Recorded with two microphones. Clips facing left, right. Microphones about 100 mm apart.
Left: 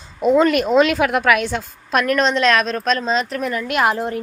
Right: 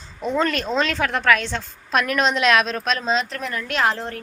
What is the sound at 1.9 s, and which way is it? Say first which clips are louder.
A woman's voice: left 3 dB; centre (ahead or behind).